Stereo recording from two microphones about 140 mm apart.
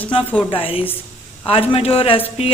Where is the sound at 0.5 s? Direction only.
40° left (ahead or behind).